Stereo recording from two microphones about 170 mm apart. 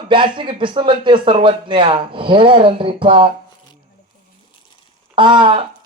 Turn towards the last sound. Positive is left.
turn(degrees=-30)  # may be behind; listen again after turning